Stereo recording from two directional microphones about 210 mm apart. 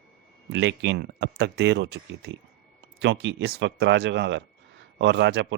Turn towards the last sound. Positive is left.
turn(degrees=-60)  # may be behind; listen again after turning